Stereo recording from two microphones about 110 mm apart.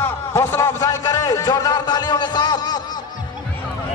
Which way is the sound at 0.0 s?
20° left (ahead or behind).